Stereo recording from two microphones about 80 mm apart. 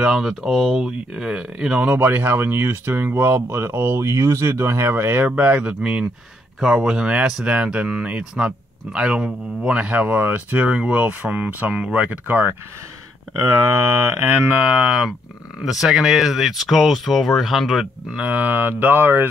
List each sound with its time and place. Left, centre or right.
0.0 s speech: centre; by 12.5 s right
14.0 s speech: right
14.7 s speech: centre
18.1 s speech: centre